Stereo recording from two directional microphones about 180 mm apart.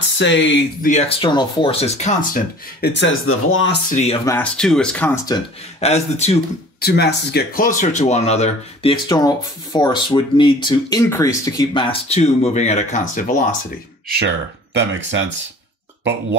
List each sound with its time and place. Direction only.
0.2 s speech: 85° left
0.8 s speech: 40° left (ahead or behind)
1.2 s speech: 25° left (ahead or behind)
2.8 s speech: 80° left
3.9 s speech: 35° left (ahead or behind)
4.3 s speech: 5° left (ahead or behind)
5.8 s speech: 35° left (ahead or behind)
6.8 s speech: 65° left (ahead or behind); by 9.0 s 35° left (ahead or behind)
9.1 s speech: 20° left (ahead or behind); by 13.6 s 50° left (ahead or behind)
14.0 s speech: 75° right (ahead or behind); by 15.3 s 90° right
16.0 s speech: 75° right (ahead or behind)